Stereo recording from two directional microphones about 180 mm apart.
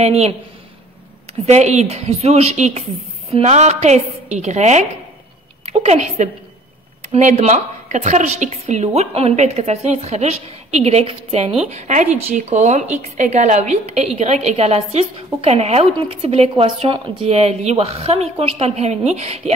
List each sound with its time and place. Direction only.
0.0 s a woman's voice: 35° right (ahead or behind)
1.4 s a woman's voice: 40° right (ahead or behind)